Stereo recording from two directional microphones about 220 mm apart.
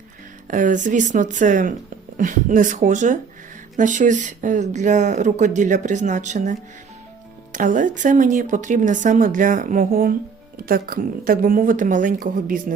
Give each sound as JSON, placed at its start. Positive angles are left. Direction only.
{"t": 0.4, "sound": "speech", "side_deg": -35}